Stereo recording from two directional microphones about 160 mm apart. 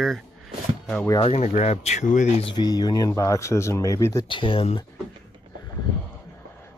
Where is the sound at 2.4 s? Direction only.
30° left (ahead or behind).